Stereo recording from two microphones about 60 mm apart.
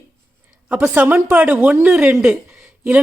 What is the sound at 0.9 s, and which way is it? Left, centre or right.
A woman's voice, right.